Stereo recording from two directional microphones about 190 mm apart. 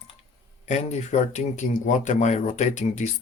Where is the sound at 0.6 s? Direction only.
35° left (ahead or behind).